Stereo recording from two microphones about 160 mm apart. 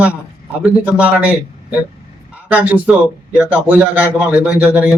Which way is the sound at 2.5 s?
10° right (ahead or behind).